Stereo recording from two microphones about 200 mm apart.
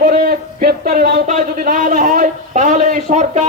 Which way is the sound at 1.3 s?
40° right (ahead or behind).